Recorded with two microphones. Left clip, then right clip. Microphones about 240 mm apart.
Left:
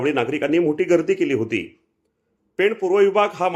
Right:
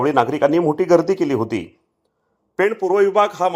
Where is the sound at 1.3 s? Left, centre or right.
Centre.